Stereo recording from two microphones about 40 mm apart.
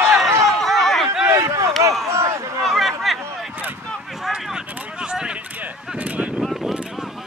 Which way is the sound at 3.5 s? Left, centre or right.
Right.